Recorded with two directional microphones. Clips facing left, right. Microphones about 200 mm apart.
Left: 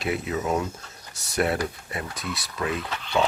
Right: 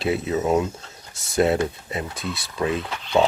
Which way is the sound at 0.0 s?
30° right (ahead or behind).